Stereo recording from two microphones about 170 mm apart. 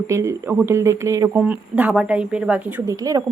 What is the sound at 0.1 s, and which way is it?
Speech, 15° right (ahead or behind).